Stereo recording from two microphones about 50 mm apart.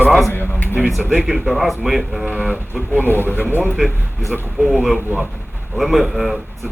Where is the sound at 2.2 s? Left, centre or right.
Right.